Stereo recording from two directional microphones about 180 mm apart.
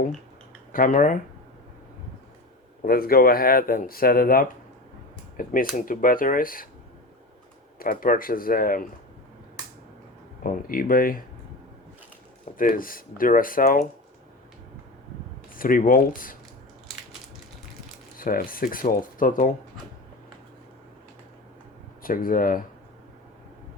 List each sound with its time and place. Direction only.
0.7 s speech: 50° left (ahead or behind)
2.8 s speech: 55° left (ahead or behind)
7.8 s speech: 50° left (ahead or behind)
10.4 s speech: 50° left (ahead or behind)
12.5 s speech: 50° left (ahead or behind)
15.5 s speech: 50° left (ahead or behind)
18.2 s speech: 50° left (ahead or behind)
22.0 s speech: 50° left (ahead or behind)